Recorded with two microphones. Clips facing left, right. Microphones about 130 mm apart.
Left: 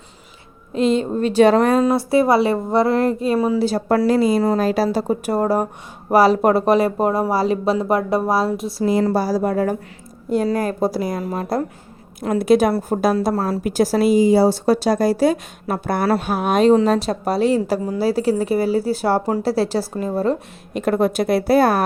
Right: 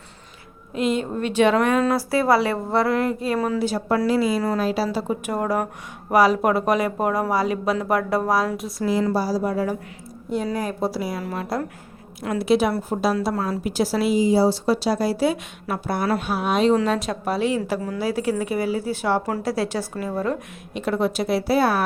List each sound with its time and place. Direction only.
0.7 s speech: 30° left (ahead or behind)
1.8 s speech: 25° left (ahead or behind)
3.6 s speech: 40° left (ahead or behind)
9.1 s speech: 55° left (ahead or behind)
16.8 s speech: 35° left (ahead or behind)
20.7 s speech: 50° left (ahead or behind)